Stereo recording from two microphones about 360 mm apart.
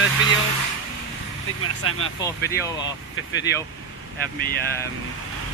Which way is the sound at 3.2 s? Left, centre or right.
Left.